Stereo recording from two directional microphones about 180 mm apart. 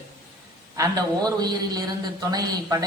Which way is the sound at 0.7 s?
20° right (ahead or behind).